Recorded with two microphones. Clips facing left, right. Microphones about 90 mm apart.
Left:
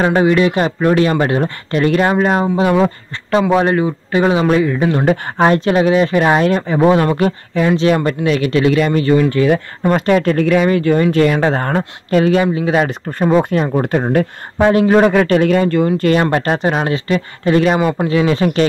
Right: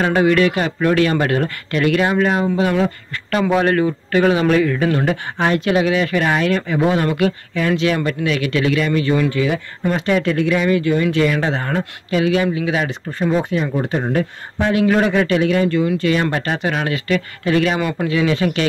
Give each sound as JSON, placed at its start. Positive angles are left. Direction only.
{"t": 0.0, "sound": "speech", "side_deg": 25}
{"t": 5.0, "sound": "speech", "side_deg": 35}
{"t": 13.3, "sound": "speech", "side_deg": 55}
{"t": 14.6, "sound": "speech", "side_deg": 40}
{"t": 15.0, "sound": "a man's voice", "side_deg": 50}
{"t": 16.4, "sound": "speech", "side_deg": 35}